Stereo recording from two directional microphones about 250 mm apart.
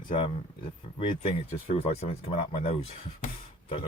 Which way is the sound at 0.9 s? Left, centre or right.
Left.